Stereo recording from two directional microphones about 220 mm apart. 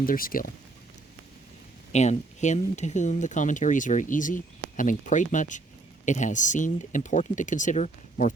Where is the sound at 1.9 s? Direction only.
30° left (ahead or behind).